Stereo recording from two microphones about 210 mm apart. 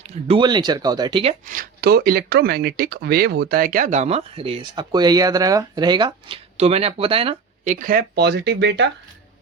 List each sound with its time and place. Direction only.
0.0 s speech: 30° right (ahead or behind); by 8.9 s 55° right (ahead or behind)